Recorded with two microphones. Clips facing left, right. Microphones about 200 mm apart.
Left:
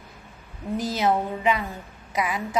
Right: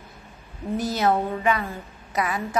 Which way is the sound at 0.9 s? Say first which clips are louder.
Right 1 dB; 15° left (ahead or behind).